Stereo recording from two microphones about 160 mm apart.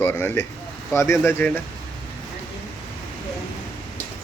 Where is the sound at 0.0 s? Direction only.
15° left (ahead or behind).